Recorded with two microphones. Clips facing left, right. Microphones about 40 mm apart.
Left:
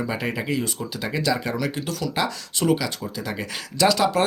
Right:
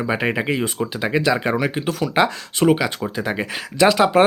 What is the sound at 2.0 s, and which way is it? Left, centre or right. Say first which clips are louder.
Speech: right 8 dB; right.